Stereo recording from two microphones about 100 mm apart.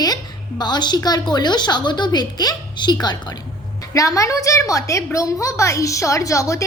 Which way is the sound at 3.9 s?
35° left (ahead or behind).